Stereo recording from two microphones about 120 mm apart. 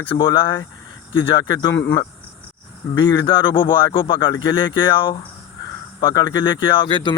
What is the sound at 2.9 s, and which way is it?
Speech, 40° left (ahead or behind).